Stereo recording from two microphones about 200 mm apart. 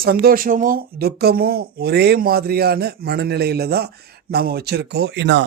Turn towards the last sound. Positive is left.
turn(degrees=-60)  # may be behind; listen again after turning